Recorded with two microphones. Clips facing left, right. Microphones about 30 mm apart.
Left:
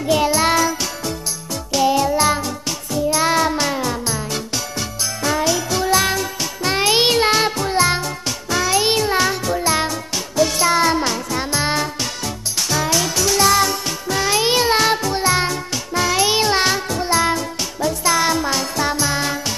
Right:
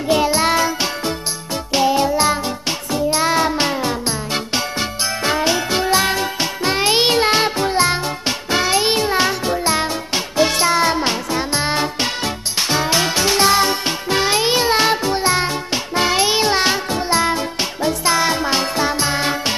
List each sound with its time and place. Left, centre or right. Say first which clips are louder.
0.1 s music: even; right